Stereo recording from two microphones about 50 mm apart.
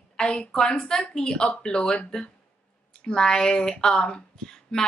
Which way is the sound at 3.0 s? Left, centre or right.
Centre.